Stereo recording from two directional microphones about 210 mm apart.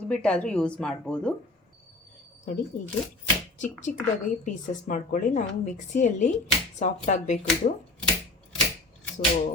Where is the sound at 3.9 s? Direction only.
40° left (ahead or behind).